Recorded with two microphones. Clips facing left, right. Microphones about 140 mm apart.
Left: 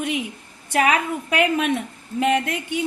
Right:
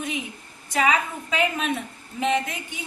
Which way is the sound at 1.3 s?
65° left (ahead or behind).